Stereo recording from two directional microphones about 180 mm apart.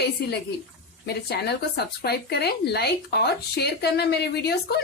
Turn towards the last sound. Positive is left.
turn(degrees=65)  # may be behind; listen again after turning